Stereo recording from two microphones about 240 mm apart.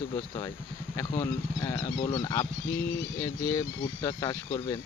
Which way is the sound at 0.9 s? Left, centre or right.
Centre.